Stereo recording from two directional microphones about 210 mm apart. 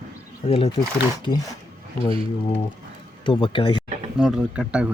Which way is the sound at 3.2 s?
25° left (ahead or behind).